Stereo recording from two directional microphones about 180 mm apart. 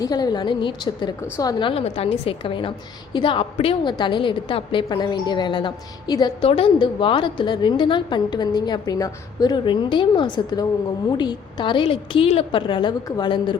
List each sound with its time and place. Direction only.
0.0 s a woman's voice: 20° left (ahead or behind)